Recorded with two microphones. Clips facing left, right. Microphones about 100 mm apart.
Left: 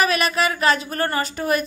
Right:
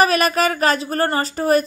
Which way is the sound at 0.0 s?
40° right (ahead or behind).